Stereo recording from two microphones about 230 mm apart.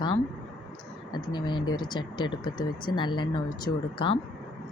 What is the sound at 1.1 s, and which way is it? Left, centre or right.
Speech, centre.